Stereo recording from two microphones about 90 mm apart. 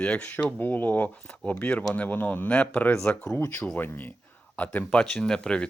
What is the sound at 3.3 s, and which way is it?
Speech, 30° left (ahead or behind).